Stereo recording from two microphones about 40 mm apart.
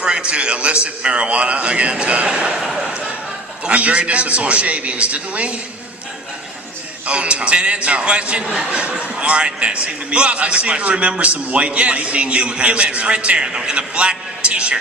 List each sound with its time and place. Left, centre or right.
0.0 s a man's voice: right
2.6 s speech: centre
3.7 s a man's voice: right
7.1 s a man's voice: right